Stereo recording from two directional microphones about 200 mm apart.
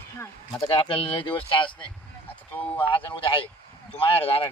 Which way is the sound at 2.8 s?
25° left (ahead or behind).